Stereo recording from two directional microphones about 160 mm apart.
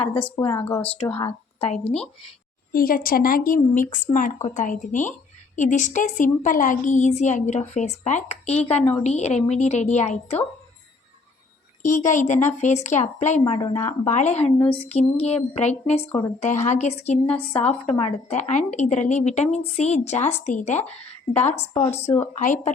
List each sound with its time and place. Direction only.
0.5 s speech: 10° left (ahead or behind)
1.6 s speech: 40° left (ahead or behind)
2.7 s a woman's voice: 65° left (ahead or behind); by 10.4 s 45° left (ahead or behind)
11.8 s a woman's voice: 50° left (ahead or behind)
13.6 s speech: 20° left (ahead or behind)
14.0 s a woman's voice: 45° left (ahead or behind)